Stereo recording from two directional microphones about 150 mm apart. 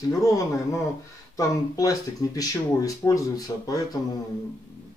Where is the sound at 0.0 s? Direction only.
20° left (ahead or behind).